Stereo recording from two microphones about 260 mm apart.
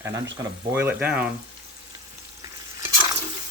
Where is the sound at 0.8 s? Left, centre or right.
Centre.